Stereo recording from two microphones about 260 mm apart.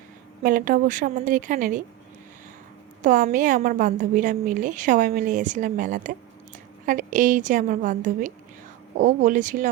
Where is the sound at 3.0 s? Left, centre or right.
Right.